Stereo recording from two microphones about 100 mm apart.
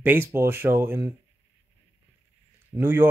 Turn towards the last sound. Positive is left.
turn(degrees=-25)  # may be behind; listen again after turning